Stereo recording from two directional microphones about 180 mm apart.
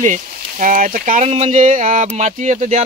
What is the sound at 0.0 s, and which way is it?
Speech, 45° right (ahead or behind).